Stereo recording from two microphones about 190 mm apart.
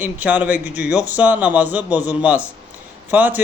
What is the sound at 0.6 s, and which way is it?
Speech, 60° left (ahead or behind).